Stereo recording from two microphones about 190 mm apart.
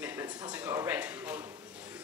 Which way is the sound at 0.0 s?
15° right (ahead or behind).